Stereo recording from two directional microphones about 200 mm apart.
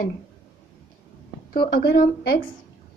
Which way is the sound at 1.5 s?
50° left (ahead or behind).